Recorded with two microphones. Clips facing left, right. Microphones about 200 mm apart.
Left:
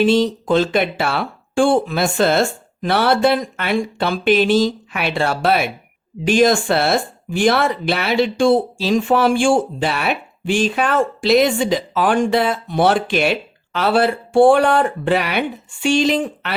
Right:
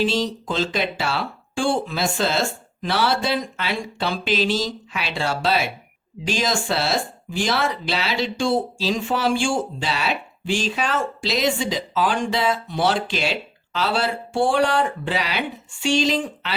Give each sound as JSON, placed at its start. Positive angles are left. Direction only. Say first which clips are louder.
{"t": 0.0, "sound": "speech", "louder": "left 7 dB", "side_deg": 55}